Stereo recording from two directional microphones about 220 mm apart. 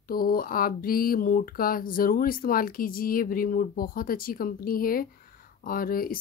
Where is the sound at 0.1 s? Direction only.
45° left (ahead or behind).